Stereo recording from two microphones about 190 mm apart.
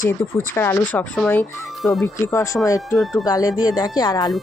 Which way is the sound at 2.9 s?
Centre (ahead or behind).